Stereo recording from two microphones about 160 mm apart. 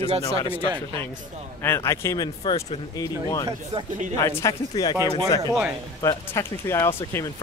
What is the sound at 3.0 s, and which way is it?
Speech, 20° left (ahead or behind).